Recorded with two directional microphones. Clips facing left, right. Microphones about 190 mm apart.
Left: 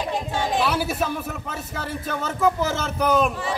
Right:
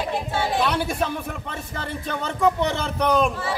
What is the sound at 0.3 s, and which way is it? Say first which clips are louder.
Chatter: even; 15° left (ahead or behind).